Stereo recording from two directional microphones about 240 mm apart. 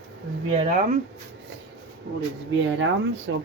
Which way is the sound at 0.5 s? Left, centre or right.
Right.